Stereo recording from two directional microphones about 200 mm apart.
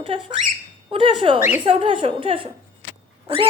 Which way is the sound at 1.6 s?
25° right (ahead or behind).